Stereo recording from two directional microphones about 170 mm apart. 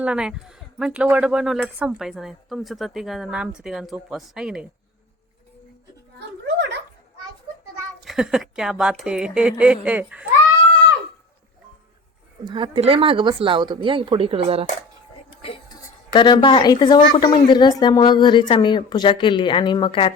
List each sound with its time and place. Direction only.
0.0 s a woman's voice: 5° right (ahead or behind)
6.1 s a sound: 90° right
8.0 s a woman's voice: centre (ahead or behind)
12.5 s speech: 30° right (ahead or behind)
15.4 s a sound: 30° left (ahead or behind)
16.1 s a woman's voice: 25° left (ahead or behind)